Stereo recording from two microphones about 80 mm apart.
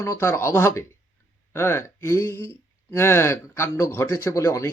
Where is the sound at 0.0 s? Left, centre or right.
Left.